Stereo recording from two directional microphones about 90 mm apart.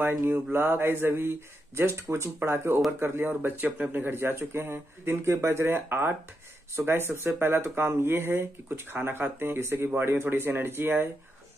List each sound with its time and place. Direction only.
0.0 s speech: 25° right (ahead or behind)